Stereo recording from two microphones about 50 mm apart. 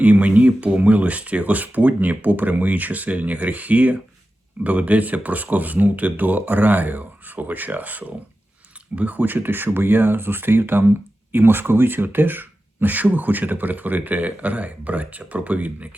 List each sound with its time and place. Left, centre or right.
0.0 s speech: right